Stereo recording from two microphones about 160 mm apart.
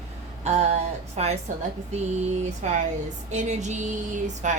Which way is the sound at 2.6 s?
45° right (ahead or behind).